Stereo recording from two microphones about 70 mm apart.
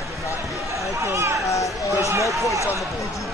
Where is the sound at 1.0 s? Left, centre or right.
Right.